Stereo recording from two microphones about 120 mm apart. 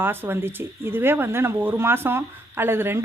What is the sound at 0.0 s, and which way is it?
Speech, 20° right (ahead or behind).